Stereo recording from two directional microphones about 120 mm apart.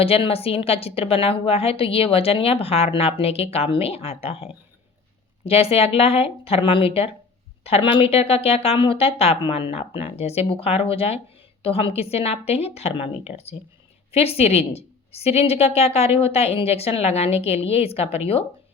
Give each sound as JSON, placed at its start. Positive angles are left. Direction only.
{"t": 0.0, "sound": "a woman's voice", "side_deg": 55}
{"t": 5.5, "sound": "a woman's voice", "side_deg": 55}